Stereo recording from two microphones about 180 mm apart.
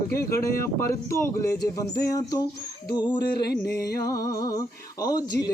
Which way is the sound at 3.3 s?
60° left (ahead or behind).